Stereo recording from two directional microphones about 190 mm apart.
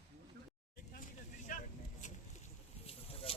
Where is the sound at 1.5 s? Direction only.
45° left (ahead or behind).